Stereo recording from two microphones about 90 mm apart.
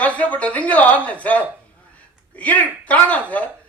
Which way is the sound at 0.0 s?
15° left (ahead or behind).